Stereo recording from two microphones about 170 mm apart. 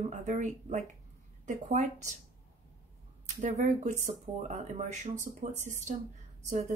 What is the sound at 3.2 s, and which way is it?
A woman's voice, 45° right (ahead or behind).